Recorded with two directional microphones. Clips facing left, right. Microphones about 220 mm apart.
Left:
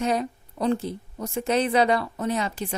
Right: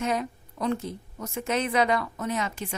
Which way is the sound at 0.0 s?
35° left (ahead or behind).